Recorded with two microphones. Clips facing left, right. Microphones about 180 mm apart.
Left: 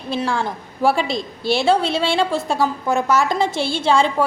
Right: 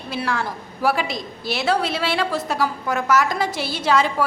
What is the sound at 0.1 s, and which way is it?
A woman's voice, 25° left (ahead or behind).